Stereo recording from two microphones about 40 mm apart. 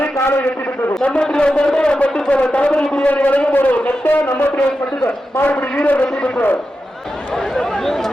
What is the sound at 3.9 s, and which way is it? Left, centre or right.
Speech, left.